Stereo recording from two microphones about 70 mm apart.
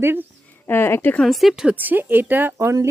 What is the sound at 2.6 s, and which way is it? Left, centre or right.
Speech, right.